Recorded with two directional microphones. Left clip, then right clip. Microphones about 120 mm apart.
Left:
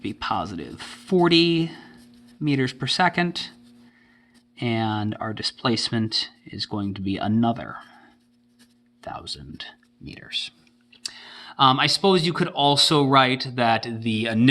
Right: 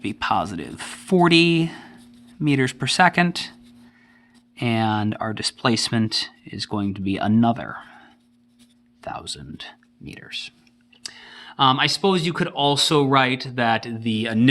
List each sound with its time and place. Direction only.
0.0 s speech: 50° right (ahead or behind)
4.5 s speech: 40° right (ahead or behind)
10.2 s speech: 15° right (ahead or behind)
11.0 s speech: centre (ahead or behind)